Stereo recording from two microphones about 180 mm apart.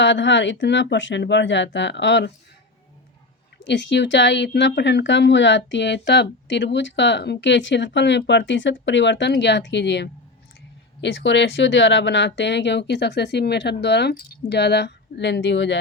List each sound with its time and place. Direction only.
0.0 s speech: 90° left
3.6 s a woman's voice: 80° left